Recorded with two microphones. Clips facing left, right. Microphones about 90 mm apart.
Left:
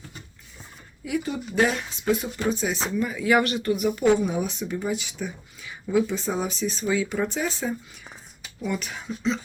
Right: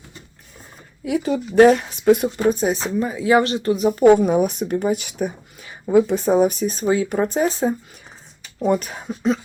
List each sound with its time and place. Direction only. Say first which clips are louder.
1.0 s speech: right 7 dB; 60° right (ahead or behind)
2.9 s speech: right 4 dB; 35° right (ahead or behind)